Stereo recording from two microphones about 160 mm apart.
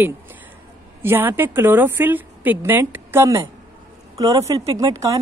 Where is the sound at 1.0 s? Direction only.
15° right (ahead or behind).